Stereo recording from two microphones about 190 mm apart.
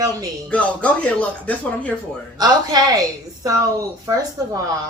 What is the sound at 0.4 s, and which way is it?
Speech, 5° left (ahead or behind).